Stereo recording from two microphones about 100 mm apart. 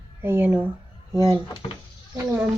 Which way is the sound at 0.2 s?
25° right (ahead or behind).